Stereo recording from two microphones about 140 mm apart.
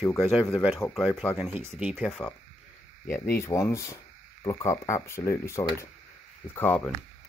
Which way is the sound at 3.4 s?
20° left (ahead or behind).